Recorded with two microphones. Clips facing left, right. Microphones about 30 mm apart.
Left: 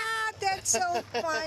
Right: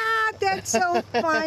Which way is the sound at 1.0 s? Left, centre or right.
Right.